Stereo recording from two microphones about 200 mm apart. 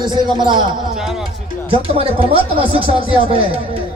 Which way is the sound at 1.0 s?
Centre (ahead or behind).